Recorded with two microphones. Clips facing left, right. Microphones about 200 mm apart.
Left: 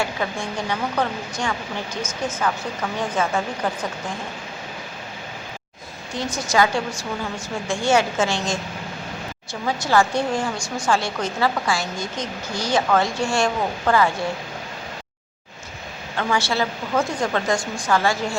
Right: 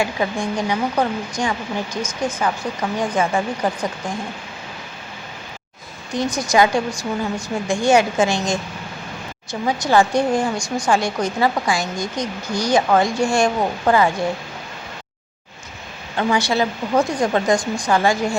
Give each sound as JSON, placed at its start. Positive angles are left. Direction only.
{"t": 0.0, "sound": "speech", "side_deg": -15}
{"t": 6.1, "sound": "speech", "side_deg": -15}
{"t": 16.1, "sound": "speech", "side_deg": -15}